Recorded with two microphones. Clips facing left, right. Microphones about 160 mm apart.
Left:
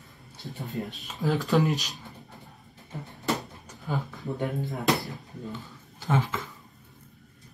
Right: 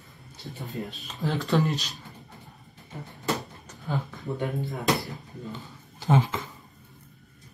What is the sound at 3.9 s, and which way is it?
Speech, centre (ahead or behind).